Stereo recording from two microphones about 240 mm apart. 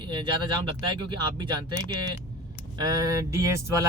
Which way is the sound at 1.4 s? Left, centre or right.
Centre.